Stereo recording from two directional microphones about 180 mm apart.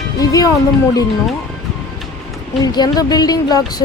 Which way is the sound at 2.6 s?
25° left (ahead or behind).